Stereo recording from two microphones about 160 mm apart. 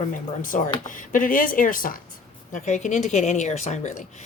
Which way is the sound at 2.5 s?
50° left (ahead or behind).